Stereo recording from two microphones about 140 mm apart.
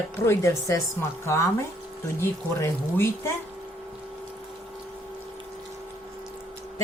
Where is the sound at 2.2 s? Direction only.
20° left (ahead or behind).